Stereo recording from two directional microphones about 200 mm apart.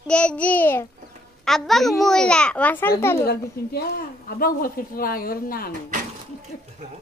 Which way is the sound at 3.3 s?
50° left (ahead or behind).